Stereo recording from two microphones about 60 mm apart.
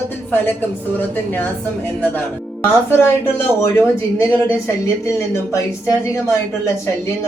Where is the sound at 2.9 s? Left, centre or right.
Left.